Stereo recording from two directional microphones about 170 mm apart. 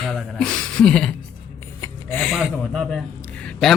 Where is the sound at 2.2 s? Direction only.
Centre (ahead or behind).